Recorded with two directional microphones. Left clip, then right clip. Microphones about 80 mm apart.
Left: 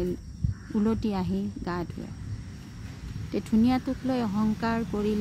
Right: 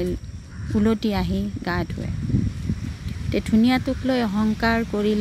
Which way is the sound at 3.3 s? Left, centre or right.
Centre.